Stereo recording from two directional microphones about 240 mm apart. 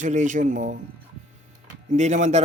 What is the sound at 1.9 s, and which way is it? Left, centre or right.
Speech, right.